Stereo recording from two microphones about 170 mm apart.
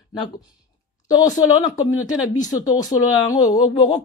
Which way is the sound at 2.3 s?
20° left (ahead or behind).